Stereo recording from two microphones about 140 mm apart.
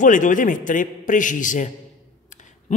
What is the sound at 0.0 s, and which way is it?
A man's voice, 65° left (ahead or behind).